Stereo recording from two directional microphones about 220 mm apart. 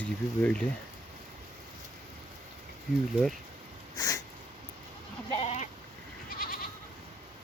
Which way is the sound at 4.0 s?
15° left (ahead or behind).